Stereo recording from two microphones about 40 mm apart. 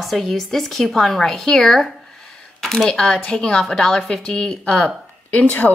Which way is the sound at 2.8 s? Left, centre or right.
Centre.